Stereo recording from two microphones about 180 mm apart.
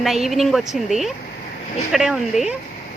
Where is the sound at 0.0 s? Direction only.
Centre (ahead or behind).